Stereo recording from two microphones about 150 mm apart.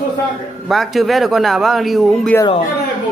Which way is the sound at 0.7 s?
Centre (ahead or behind).